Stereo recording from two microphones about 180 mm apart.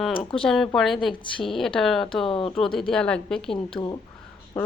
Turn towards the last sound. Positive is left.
turn(degrees=10)  # may be behind; listen again after turning